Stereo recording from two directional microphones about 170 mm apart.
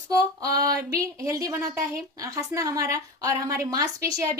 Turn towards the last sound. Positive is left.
turn(degrees=-20)  # may be behind; listen again after turning